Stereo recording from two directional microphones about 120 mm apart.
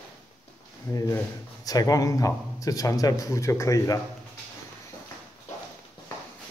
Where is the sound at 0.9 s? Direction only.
25° left (ahead or behind).